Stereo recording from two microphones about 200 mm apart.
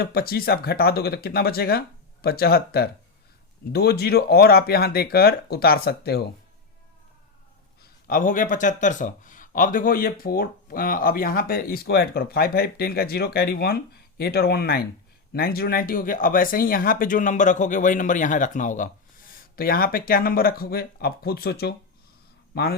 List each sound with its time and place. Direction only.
0.0 s speech: 50° left (ahead or behind)
7.8 s speech: 45° left (ahead or behind)